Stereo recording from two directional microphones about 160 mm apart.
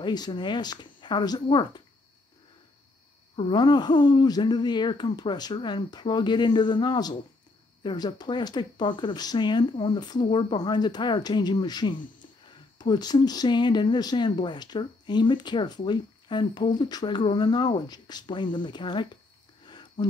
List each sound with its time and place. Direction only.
0.0 s speech: 25° left (ahead or behind)
3.3 s speech: 30° left (ahead or behind)
19.6 s a sound: 30° left (ahead or behind)